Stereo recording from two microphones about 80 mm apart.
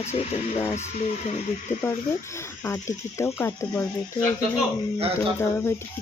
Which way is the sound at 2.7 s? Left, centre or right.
Left.